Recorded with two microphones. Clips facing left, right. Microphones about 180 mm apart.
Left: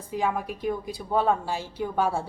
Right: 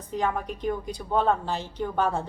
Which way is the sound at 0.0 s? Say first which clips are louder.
Even; 10° left (ahead or behind).